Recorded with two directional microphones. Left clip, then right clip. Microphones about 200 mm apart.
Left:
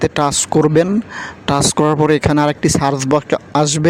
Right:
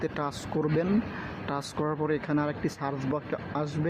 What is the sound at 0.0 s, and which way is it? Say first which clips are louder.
Speech: left 16 dB; 55° left (ahead or behind).